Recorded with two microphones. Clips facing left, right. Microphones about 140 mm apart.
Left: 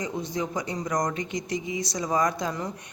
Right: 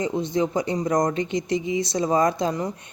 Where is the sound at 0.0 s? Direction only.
25° right (ahead or behind).